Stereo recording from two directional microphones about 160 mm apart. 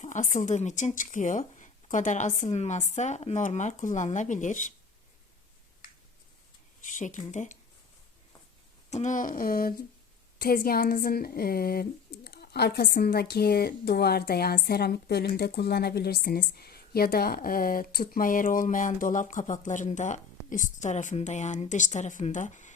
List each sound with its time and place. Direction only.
0.0 s speech: 50° left (ahead or behind)
6.8 s speech: 50° left (ahead or behind)
8.9 s a sound: 45° left (ahead or behind); by 9.8 s 65° left (ahead or behind)
10.3 s speech: 65° left (ahead or behind)